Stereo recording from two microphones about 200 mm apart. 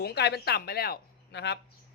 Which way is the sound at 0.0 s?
55° left (ahead or behind).